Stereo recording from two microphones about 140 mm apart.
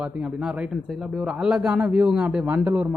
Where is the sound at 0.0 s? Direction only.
10° right (ahead or behind).